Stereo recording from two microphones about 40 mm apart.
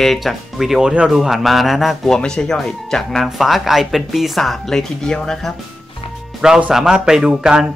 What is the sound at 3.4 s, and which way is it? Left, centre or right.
A woman's voice, centre.